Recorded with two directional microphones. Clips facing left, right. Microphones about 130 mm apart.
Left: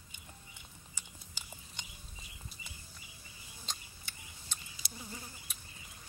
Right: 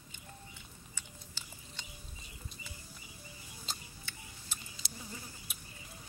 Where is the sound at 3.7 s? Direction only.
5° right (ahead or behind).